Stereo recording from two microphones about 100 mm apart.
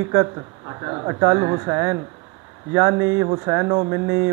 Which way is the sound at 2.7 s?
25° right (ahead or behind).